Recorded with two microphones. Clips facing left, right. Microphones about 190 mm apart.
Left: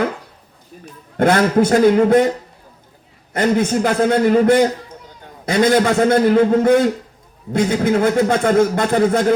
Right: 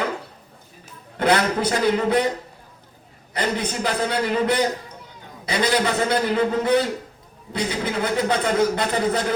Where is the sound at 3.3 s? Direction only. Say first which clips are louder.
Left 9 dB; 45° left (ahead or behind).